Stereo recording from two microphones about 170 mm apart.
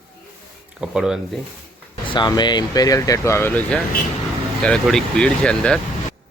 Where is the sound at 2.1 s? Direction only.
25° left (ahead or behind).